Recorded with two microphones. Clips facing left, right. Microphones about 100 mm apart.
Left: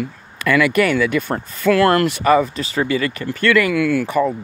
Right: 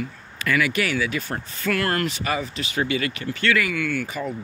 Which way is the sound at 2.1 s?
55° left (ahead or behind).